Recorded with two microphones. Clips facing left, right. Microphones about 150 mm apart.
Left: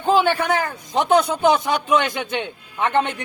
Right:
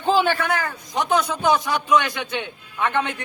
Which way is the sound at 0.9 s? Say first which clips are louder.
Left 4 dB; 25° left (ahead or behind).